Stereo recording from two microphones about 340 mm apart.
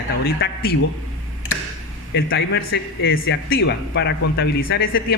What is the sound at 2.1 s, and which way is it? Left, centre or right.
A man's voice, left.